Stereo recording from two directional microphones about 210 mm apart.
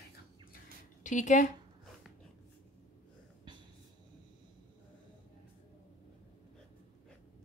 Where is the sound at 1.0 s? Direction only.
35° left (ahead or behind).